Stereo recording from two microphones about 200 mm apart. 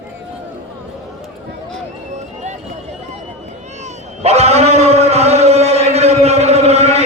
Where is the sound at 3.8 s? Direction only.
30° right (ahead or behind).